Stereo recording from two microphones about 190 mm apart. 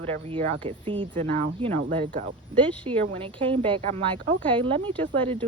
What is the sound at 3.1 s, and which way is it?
Speech, 30° right (ahead or behind).